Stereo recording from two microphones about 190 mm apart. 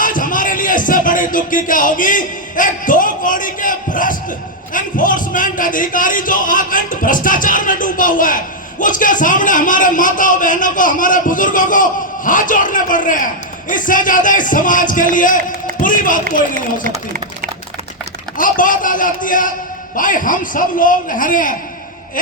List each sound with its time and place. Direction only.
0.0 s music: 45° left (ahead or behind)
15.8 s speech: 45° left (ahead or behind)
18.3 s music: 45° left (ahead or behind)